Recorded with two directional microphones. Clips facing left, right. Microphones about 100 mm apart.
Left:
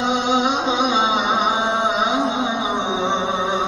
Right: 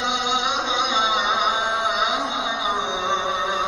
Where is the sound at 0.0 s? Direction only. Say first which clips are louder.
Left 5 dB; 35° left (ahead or behind).